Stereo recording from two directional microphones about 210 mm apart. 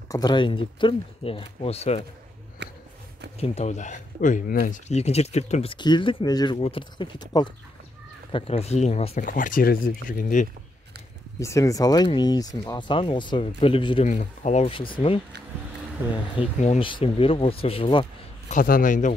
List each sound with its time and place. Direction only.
0.1 s speech: 20° left (ahead or behind)
2.6 s a sound: 55° right (ahead or behind)
3.3 s speech: 30° left (ahead or behind)
11.3 s speech: 15° left (ahead or behind)
18.5 s speech: 40° left (ahead or behind)